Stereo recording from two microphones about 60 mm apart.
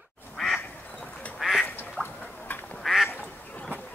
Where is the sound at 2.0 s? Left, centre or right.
Centre.